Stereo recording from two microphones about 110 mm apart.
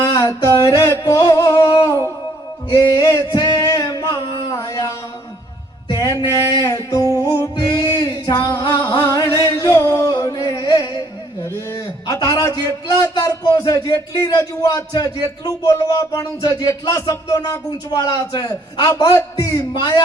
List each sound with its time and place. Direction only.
0.1 s a sound: 30° left (ahead or behind)
2.6 s singing: 35° left (ahead or behind)
5.9 s music: 35° left (ahead or behind)
6.6 s speech: 30° left (ahead or behind)
7.2 s music: 30° left (ahead or behind)
11.4 s a sound: 30° left (ahead or behind)
13.0 s speech: 35° left (ahead or behind)